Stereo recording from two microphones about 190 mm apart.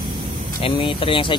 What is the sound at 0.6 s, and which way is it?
Speech, 30° left (ahead or behind).